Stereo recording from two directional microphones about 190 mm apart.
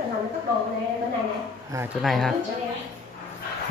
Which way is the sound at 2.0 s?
Centre (ahead or behind).